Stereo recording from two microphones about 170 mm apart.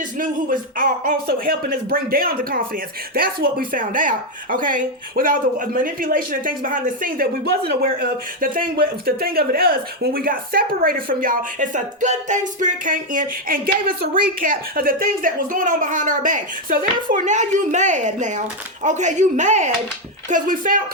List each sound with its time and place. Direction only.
0.2 s a woman's voice: 55° right (ahead or behind)